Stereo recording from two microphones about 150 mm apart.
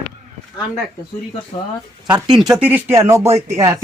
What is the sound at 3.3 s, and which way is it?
Speech, 45° right (ahead or behind).